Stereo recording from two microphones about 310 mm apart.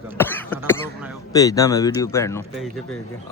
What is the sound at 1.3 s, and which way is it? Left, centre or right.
Speech, centre.